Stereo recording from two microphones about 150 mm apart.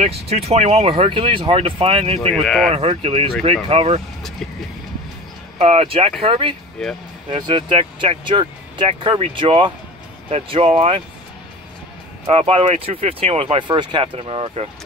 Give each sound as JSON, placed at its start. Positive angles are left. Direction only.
{"t": 0.3, "sound": "speech", "side_deg": -45}
{"t": 2.4, "sound": "speech", "side_deg": 5}
{"t": 2.7, "sound": "speech", "side_deg": -40}
{"t": 5.6, "sound": "speech", "side_deg": -40}
{"t": 6.8, "sound": "speech", "side_deg": 5}
{"t": 7.2, "sound": "speech", "side_deg": -35}
{"t": 12.3, "sound": "speech", "side_deg": -45}